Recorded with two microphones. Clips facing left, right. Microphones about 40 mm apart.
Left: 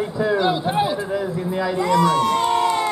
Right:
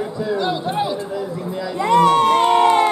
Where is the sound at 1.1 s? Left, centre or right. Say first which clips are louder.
Left 2 dB; left.